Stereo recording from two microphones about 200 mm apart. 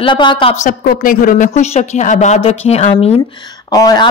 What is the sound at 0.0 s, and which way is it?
Speech, 25° left (ahead or behind).